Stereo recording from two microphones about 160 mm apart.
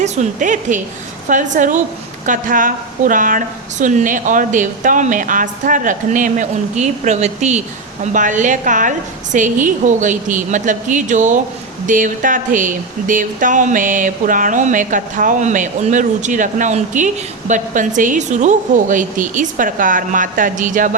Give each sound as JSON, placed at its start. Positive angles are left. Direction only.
{"t": 0.0, "sound": "a woman's voice", "side_deg": -50}